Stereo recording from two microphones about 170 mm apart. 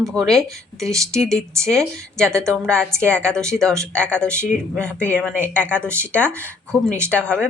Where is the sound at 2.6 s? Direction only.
5° left (ahead or behind).